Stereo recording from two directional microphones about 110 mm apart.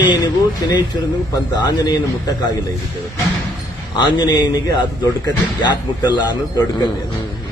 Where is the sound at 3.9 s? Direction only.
40° left (ahead or behind).